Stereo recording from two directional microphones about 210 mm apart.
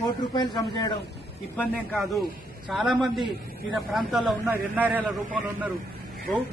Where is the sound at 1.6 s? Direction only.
5° left (ahead or behind).